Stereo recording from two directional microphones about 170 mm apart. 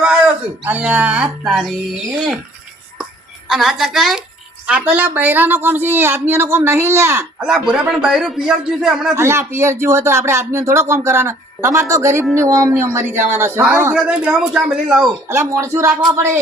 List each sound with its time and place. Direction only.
0.6 s speech: 10° right (ahead or behind)
3.5 s a man's voice: centre (ahead or behind)
7.4 s a man's voice: 5° right (ahead or behind)
9.1 s a man's voice: 15° right (ahead or behind)
15.3 s speech: 15° right (ahead or behind)